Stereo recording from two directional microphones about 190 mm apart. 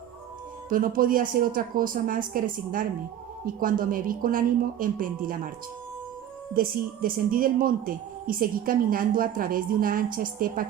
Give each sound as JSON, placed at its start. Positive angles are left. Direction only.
{"t": 0.7, "sound": "speech", "side_deg": -50}
{"t": 6.6, "sound": "speech", "side_deg": -50}